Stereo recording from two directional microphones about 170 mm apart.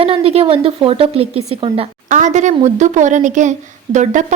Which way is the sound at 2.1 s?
45° right (ahead or behind).